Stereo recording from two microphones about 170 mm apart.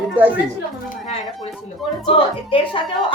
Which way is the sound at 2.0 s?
30° left (ahead or behind).